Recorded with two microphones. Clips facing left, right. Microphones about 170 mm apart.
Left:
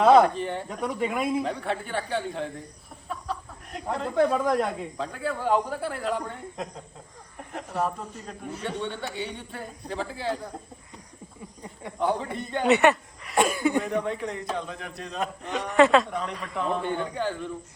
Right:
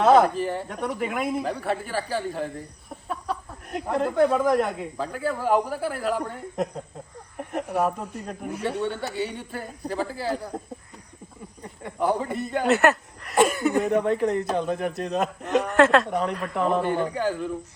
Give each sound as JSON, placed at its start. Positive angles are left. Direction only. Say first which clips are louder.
{"t": 0.0, "sound": "speech", "louder": "even", "side_deg": 0}
{"t": 4.1, "sound": "speech", "louder": "right 2 dB", "side_deg": -5}
{"t": 7.5, "sound": "speech", "louder": "right 4 dB", "side_deg": -10}
{"t": 11.9, "sound": "speech", "louder": "right 3 dB", "side_deg": -5}
{"t": 13.9, "sound": "a man's voice", "louder": "right 7 dB", "side_deg": -45}
{"t": 15.4, "sound": "speech", "louder": "right 1 dB", "side_deg": 0}
{"t": 16.0, "sound": "a man's voice", "louder": "right 6 dB", "side_deg": -50}
{"t": 16.3, "sound": "speech", "louder": "right 4 dB", "side_deg": 0}